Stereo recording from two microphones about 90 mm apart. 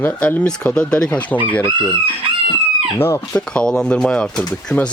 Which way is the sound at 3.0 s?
25° left (ahead or behind).